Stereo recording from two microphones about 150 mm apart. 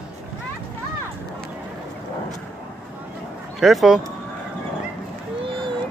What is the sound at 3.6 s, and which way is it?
Speech, centre (ahead or behind).